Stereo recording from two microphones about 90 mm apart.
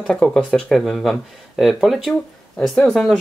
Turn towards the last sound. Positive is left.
turn(degrees=0)  # may be behind; listen again after turning